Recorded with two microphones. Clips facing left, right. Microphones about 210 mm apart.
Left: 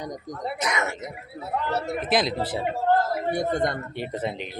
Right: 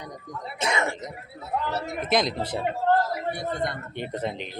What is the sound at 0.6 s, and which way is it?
Speech, 30° right (ahead or behind).